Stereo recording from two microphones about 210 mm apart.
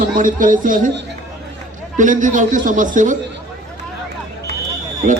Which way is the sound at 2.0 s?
40° right (ahead or behind).